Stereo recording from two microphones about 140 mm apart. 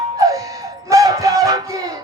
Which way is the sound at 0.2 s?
25° right (ahead or behind).